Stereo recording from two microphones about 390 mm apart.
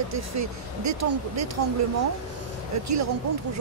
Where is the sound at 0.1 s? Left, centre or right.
Right.